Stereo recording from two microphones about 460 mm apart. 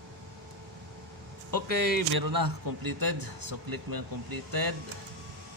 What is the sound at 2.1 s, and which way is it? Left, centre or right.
A man's voice, right.